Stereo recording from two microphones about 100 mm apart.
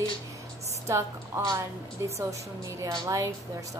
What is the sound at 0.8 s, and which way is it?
A woman's voice, 30° right (ahead or behind).